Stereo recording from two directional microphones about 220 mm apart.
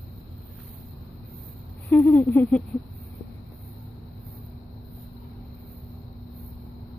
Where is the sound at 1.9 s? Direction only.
10° left (ahead or behind).